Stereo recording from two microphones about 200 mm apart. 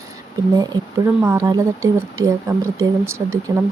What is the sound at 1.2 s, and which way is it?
Speech, 15° right (ahead or behind).